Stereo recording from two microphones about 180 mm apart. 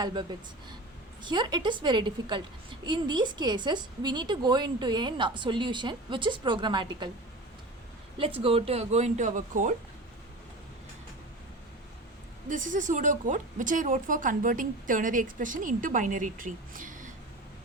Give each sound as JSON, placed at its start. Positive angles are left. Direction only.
{"t": 0.0, "sound": "a woman's voice", "side_deg": -25}
{"t": 8.4, "sound": "speech", "side_deg": -35}
{"t": 12.5, "sound": "a woman's voice", "side_deg": -45}